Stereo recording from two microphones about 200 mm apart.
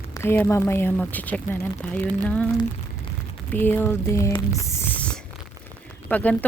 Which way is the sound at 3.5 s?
10° left (ahead or behind).